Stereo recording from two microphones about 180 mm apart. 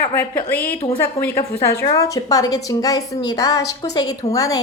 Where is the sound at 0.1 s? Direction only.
10° left (ahead or behind).